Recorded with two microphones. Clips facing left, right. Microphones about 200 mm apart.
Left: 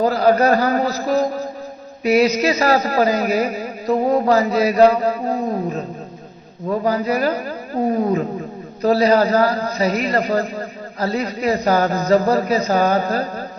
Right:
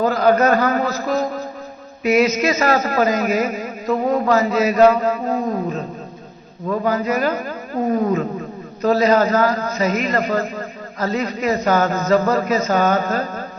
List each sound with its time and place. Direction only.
0.0 s a man's voice: 35° left (ahead or behind)